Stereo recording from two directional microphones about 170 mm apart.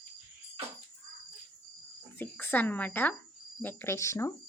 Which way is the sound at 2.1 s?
10° left (ahead or behind).